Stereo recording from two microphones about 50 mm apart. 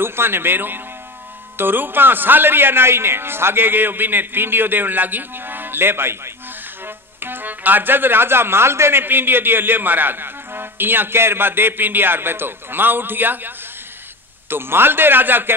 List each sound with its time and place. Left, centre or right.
0.0 s a man's voice: right
9.0 s a man's voice: right
14.5 s a man's voice: right